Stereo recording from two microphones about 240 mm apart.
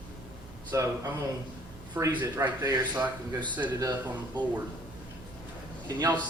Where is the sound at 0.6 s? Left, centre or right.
Centre.